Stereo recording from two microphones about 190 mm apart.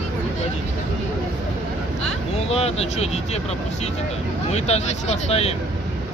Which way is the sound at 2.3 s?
35° left (ahead or behind).